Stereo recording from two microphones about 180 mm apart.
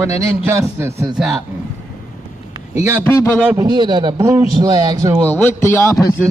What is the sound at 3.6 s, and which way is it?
A man's voice, 25° right (ahead or behind).